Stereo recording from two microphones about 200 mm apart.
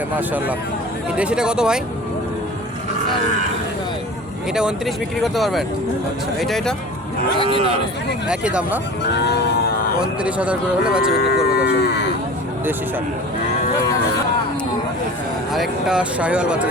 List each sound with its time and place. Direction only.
0.2 s speech: 10° right (ahead or behind)
4.5 s speech: centre (ahead or behind)
7.4 s speech: 25° right (ahead or behind)
8.3 s speech: 5° right (ahead or behind)
9.1 s music: 55° left (ahead or behind)
10.0 s speech: 5° right (ahead or behind)
11.1 s cattle: 55° left (ahead or behind)
15.5 s speech: centre (ahead or behind)